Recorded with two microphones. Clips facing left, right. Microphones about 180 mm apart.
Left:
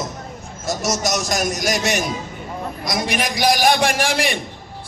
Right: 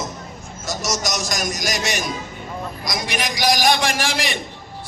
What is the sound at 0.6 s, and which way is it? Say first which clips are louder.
A man's voice: left 3 dB; 60° left (ahead or behind).